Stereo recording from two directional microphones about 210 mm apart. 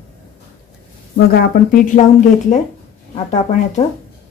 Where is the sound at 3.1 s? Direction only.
35° left (ahead or behind).